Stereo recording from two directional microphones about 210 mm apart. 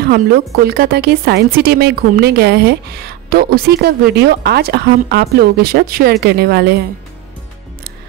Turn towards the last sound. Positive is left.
turn(degrees=-50)  # may be behind; listen again after turning